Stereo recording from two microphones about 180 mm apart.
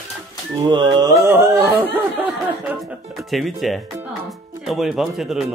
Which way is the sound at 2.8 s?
Centre (ahead or behind).